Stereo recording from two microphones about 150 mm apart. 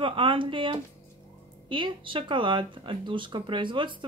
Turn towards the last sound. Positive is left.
turn(degrees=-35)  # may be behind; listen again after turning